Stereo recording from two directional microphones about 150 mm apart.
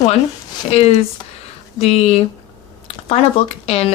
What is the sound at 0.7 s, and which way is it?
Speech, 45° left (ahead or behind).